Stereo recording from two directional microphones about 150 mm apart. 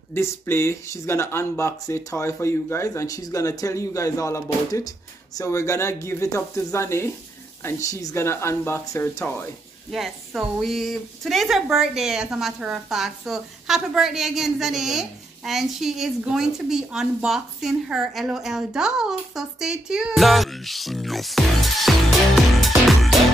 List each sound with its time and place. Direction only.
0.1 s speech: 15° left (ahead or behind)
9.8 s a woman's voice: centre (ahead or behind)
22.6 s music: centre (ahead or behind)